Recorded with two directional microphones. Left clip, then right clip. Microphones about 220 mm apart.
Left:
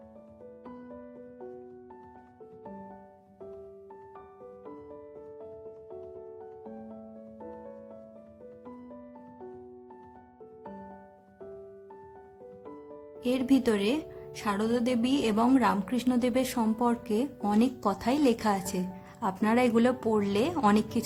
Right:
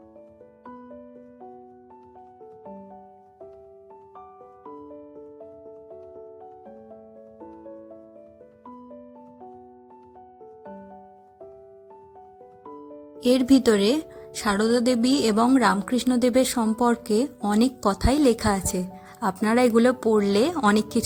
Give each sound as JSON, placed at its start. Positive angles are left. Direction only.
{"t": 13.2, "sound": "speech", "side_deg": -25}